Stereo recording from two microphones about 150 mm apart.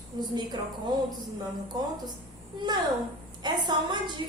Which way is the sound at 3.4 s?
30° right (ahead or behind).